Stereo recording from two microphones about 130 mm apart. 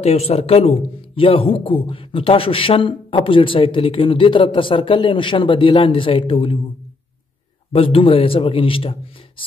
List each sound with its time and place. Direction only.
0.0 s speech: 55° left (ahead or behind)
7.7 s speech: 45° left (ahead or behind)